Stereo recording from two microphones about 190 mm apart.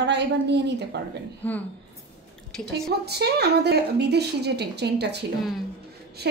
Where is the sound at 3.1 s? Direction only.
60° right (ahead or behind).